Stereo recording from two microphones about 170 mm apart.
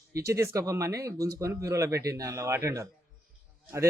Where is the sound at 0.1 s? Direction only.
15° right (ahead or behind).